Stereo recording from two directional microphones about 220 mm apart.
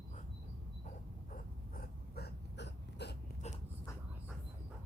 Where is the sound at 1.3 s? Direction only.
45° left (ahead or behind).